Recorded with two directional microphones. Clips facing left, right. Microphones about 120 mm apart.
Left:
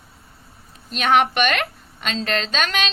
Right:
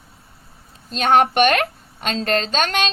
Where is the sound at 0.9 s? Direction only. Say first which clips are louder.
Right 2 dB; 35° right (ahead or behind).